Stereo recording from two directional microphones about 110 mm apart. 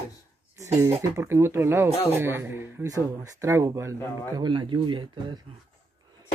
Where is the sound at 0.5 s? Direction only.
25° right (ahead or behind).